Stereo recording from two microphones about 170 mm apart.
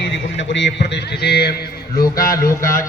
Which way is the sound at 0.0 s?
90° left.